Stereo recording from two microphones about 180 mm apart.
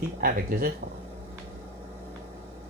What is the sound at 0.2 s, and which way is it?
Speech, 55° right (ahead or behind).